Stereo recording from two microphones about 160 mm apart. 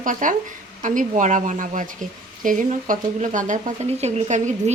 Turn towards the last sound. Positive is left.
turn(degrees=-45)  # may be behind; listen again after turning